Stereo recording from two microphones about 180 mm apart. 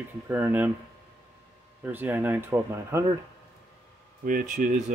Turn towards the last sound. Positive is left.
turn(degrees=-50)  # may be behind; listen again after turning